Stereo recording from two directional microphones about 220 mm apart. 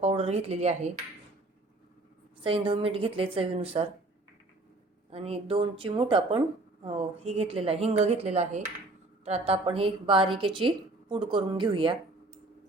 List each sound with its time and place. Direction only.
0.0 s speech: 30° right (ahead or behind)
2.4 s a woman's voice: 25° right (ahead or behind)
5.1 s a woman's voice: 25° right (ahead or behind)